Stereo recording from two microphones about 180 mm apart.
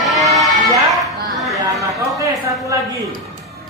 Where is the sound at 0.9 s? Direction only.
Centre (ahead or behind).